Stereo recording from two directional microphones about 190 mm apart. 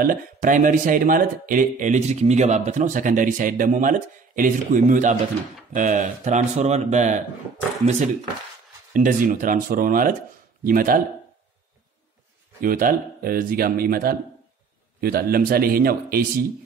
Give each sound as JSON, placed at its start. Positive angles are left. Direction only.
{"t": 0.0, "sound": "speech", "side_deg": -45}
{"t": 8.9, "sound": "speech", "side_deg": -45}
{"t": 12.6, "sound": "speech", "side_deg": -45}